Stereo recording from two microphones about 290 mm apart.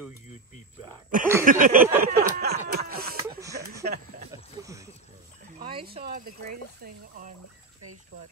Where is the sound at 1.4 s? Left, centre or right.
Right.